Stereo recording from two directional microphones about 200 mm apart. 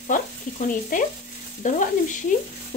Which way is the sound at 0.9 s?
40° left (ahead or behind).